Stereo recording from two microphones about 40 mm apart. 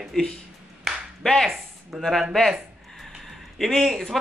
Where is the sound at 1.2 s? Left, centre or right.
Centre.